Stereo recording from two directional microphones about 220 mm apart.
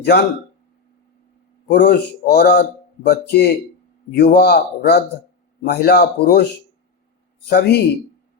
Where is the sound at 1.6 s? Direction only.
50° left (ahead or behind).